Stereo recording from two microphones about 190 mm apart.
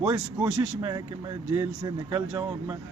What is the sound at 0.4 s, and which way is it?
Speech, 20° right (ahead or behind).